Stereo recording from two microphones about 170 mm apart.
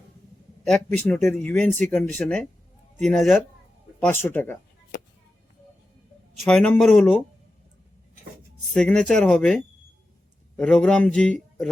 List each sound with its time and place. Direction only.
0.6 s a man's voice: 5° left (ahead or behind)
6.5 s a man's voice: 5° left (ahead or behind)
8.7 s a man's voice: 5° left (ahead or behind)